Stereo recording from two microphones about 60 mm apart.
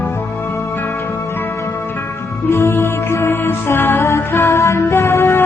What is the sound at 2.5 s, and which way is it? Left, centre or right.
Music, left.